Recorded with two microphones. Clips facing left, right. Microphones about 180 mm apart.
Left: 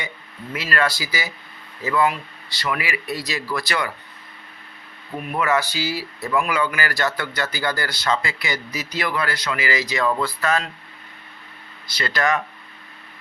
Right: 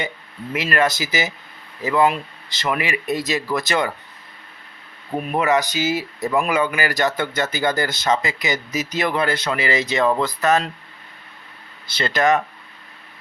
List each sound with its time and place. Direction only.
0.5 s speech: 20° right (ahead or behind)
5.3 s speech: 20° right (ahead or behind)
11.9 s speech: 25° right (ahead or behind)